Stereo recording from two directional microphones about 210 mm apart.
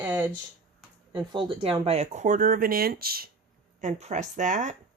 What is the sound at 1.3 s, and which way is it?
Speech, 25° right (ahead or behind).